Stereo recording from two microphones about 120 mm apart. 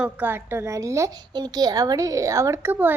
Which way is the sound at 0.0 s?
15° right (ahead or behind).